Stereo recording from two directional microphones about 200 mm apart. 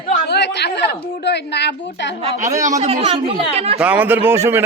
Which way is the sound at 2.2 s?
30° right (ahead or behind).